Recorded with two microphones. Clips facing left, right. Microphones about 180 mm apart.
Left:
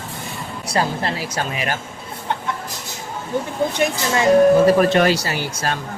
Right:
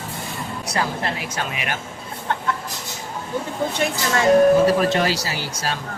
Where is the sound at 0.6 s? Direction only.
30° left (ahead or behind).